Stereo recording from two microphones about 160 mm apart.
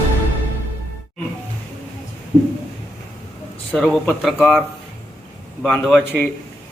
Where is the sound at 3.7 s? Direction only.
5° left (ahead or behind).